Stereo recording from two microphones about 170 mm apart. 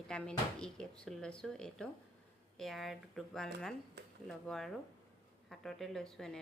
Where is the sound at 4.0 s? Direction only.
85° right.